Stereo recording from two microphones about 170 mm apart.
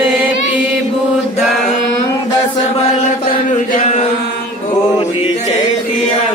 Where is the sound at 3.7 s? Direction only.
45° left (ahead or behind).